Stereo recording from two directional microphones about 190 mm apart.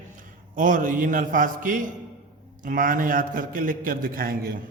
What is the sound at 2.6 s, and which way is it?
Mantra, 45° right (ahead or behind).